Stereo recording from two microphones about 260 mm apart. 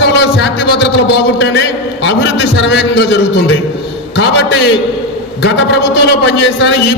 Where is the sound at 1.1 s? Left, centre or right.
Left.